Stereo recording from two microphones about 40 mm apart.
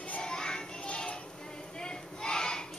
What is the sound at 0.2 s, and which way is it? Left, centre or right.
Music, centre.